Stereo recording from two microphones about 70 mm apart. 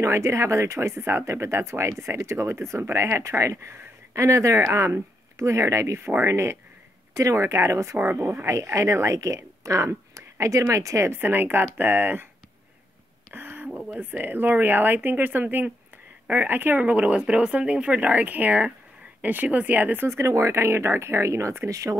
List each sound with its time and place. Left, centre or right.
0.0 s speech: right
8.5 s speech: right
11.1 s speech: right
13.3 s a sound: right
13.9 s speech: right
20.1 s speech: right